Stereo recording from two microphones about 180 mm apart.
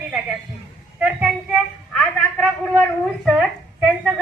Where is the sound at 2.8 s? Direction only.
Centre (ahead or behind).